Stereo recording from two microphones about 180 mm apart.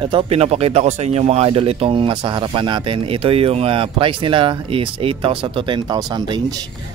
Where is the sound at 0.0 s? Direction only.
30° right (ahead or behind).